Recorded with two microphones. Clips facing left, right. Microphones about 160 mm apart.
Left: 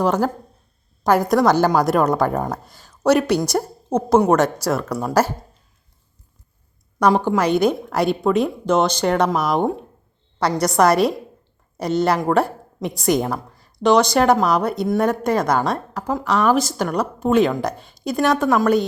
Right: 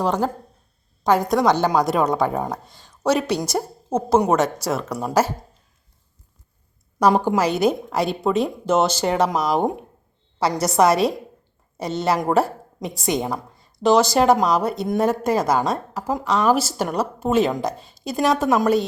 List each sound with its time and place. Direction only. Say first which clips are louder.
0.0 s a woman's voice: left 3 dB; 5° left (ahead or behind)
7.3 s a woman's voice: left 2 dB; 5° right (ahead or behind)
18.4 s a woman's voice: left 1 dB; 20° right (ahead or behind)